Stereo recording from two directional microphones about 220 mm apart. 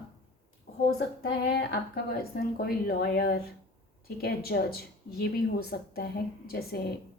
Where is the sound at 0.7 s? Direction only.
45° left (ahead or behind).